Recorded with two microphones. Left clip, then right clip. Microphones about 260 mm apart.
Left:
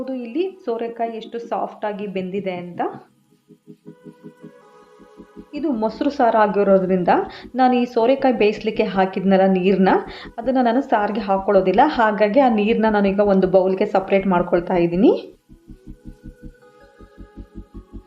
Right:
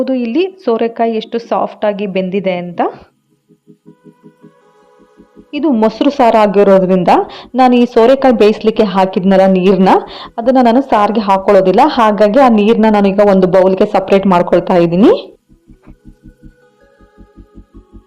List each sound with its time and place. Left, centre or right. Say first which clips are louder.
0.0 s a woman's voice: right 10 dB; right
5.5 s a woman's voice: right 10 dB; right